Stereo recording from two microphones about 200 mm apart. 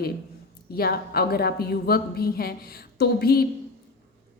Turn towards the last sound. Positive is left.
turn(degrees=50)  # may be behind; listen again after turning